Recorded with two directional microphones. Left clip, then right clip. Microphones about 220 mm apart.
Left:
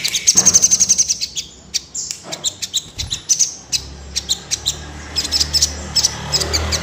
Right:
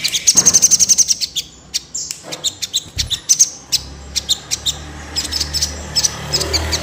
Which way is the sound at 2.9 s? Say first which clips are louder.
Right 5 dB; 20° right (ahead or behind).